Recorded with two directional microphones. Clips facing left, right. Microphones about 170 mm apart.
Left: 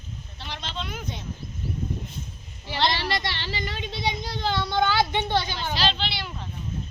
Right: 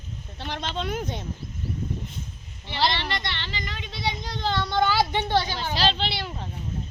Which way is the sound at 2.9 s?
35° left (ahead or behind).